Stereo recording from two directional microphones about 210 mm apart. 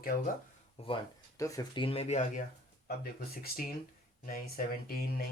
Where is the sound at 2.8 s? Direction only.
45° left (ahead or behind).